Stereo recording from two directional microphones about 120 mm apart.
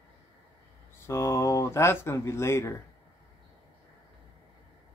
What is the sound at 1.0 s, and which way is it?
Speech, 25° left (ahead or behind).